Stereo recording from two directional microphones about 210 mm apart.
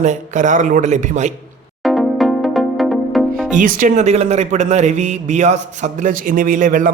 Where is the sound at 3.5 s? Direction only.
40° right (ahead or behind).